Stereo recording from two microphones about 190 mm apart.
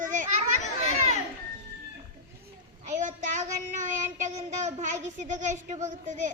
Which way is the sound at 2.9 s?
40° right (ahead or behind).